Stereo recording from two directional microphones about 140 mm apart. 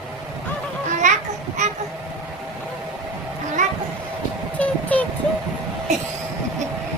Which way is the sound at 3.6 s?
60° right (ahead or behind).